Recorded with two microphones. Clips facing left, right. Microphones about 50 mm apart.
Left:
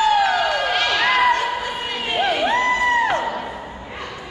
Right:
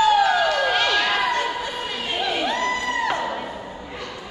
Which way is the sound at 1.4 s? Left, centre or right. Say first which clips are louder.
Left 2 dB; left.